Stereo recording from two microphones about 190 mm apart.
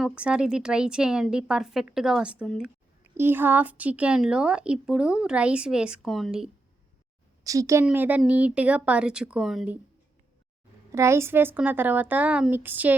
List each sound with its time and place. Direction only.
0.0 s speech: 5° right (ahead or behind)
7.4 s a woman's voice: 15° right (ahead or behind); by 9.7 s centre (ahead or behind)
10.9 s speech: 15° right (ahead or behind)